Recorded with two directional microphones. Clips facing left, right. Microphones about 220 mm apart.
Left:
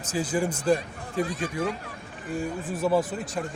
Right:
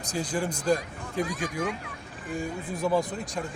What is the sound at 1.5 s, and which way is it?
Speech, 30° left (ahead or behind).